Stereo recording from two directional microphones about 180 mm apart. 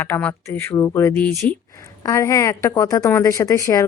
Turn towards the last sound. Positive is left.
turn(degrees=15)  # may be behind; listen again after turning